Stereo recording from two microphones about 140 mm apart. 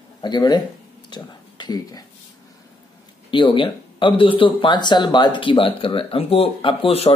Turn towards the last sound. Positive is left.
turn(degrees=40)  # may be behind; listen again after turning